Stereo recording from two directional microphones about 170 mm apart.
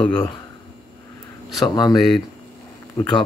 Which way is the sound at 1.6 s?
25° left (ahead or behind).